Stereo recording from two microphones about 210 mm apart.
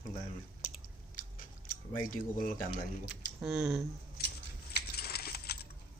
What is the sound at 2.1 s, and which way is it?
Speech, 40° left (ahead or behind).